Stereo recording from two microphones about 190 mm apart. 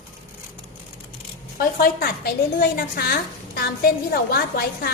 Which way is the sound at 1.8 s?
50° left (ahead or behind).